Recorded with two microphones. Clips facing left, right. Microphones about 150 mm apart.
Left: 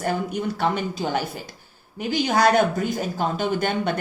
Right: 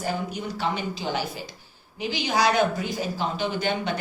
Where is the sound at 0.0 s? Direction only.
55° left (ahead or behind).